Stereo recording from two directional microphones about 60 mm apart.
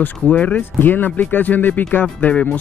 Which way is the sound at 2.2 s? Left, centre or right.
Centre.